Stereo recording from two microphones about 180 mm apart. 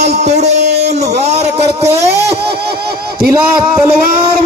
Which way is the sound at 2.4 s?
60° right (ahead or behind).